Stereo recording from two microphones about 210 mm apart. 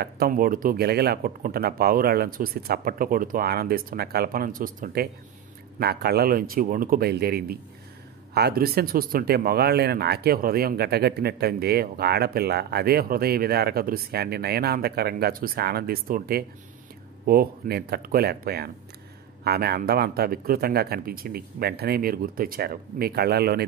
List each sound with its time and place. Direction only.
0.0 s speech: 45° right (ahead or behind)